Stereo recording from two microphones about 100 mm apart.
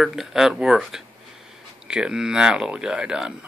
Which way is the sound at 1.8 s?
10° right (ahead or behind).